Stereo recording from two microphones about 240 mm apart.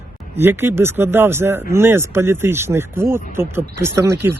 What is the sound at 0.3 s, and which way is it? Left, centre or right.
Speech, centre.